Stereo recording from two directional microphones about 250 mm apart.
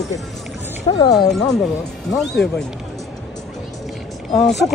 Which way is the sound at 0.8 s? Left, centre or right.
Centre.